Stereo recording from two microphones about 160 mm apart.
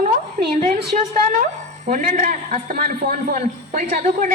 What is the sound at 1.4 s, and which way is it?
Speech, 55° right (ahead or behind).